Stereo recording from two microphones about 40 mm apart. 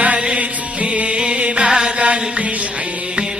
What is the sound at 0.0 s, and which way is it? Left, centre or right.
Music, right.